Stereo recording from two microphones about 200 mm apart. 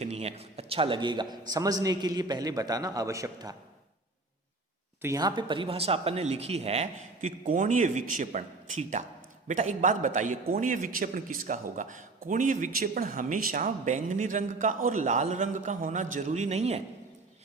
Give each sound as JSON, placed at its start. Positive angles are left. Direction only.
{"t": 0.0, "sound": "a man's voice", "side_deg": -30}
{"t": 5.0, "sound": "a man's voice", "side_deg": -20}